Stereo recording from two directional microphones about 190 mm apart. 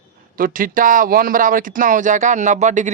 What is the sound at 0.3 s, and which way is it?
Speech, 45° right (ahead or behind).